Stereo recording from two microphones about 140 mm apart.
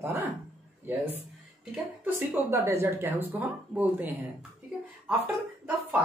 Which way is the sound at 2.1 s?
20° right (ahead or behind).